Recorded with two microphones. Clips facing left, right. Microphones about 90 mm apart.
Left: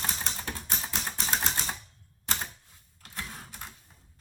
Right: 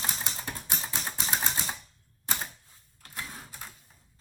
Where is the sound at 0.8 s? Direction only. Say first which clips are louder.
Even; centre (ahead or behind).